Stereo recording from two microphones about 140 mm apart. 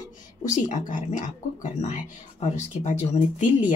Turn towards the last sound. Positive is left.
turn(degrees=60)  # may be behind; listen again after turning